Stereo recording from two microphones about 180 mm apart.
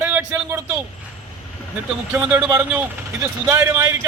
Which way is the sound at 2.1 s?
10° right (ahead or behind).